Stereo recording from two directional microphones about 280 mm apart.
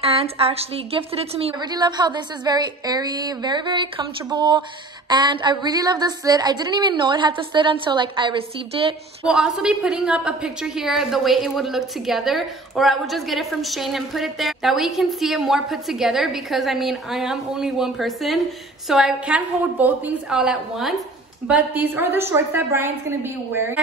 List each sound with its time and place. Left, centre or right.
0.0 s a woman's voice: right
9.2 s a woman's voice: centre